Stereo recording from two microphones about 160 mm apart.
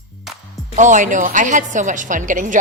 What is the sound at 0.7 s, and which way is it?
A woman's voice, 50° right (ahead or behind).